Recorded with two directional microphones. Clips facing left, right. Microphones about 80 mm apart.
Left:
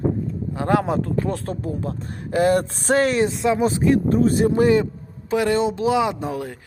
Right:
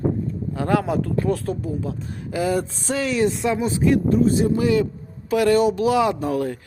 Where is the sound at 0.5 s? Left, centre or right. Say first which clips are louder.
Left 1 dB; left.